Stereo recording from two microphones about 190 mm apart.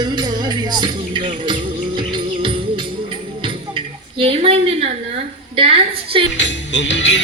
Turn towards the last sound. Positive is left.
turn(degrees=70)  # may be behind; listen again after turning